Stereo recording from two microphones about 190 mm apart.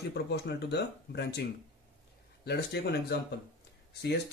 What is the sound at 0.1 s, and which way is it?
Speech, 60° left (ahead or behind).